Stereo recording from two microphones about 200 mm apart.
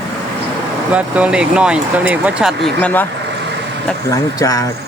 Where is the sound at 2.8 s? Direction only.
10° left (ahead or behind).